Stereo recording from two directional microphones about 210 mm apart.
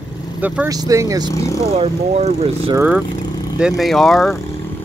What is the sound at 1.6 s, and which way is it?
Speech, 30° right (ahead or behind).